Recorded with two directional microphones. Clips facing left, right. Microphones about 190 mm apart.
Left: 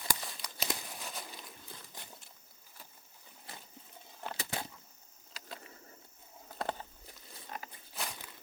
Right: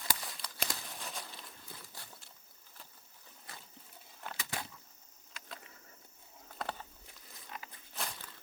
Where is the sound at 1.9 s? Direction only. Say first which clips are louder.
Left 2 dB; 20° left (ahead or behind).